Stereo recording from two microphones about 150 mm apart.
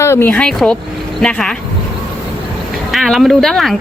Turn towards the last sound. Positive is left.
turn(degrees=0)  # may be behind; listen again after turning